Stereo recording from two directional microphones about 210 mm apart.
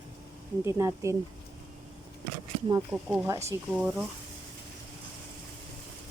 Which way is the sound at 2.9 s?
5° right (ahead or behind).